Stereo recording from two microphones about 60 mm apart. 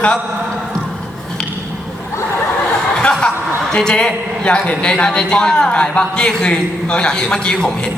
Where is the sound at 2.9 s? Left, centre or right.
Centre.